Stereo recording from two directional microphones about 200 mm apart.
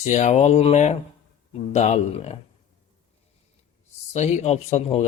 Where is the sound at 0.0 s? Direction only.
35° left (ahead or behind).